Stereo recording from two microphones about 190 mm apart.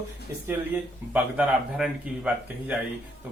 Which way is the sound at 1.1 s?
5° right (ahead or behind).